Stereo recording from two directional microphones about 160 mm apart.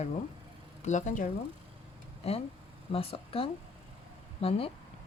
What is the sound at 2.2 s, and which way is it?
Speech, 40° left (ahead or behind).